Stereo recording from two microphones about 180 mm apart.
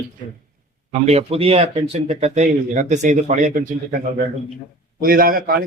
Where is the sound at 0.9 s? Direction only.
35° right (ahead or behind).